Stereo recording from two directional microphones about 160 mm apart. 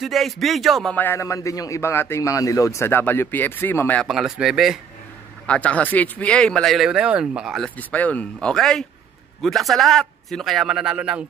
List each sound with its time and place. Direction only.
0.0 s speech: centre (ahead or behind)
0.9 s a man's voice: 15° left (ahead or behind)
4.1 s speech: centre (ahead or behind)
5.5 s speech: 10° left (ahead or behind); by 11.2 s 5° right (ahead or behind)